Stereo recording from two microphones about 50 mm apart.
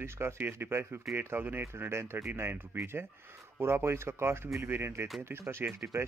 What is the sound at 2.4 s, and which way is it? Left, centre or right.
Speech, right.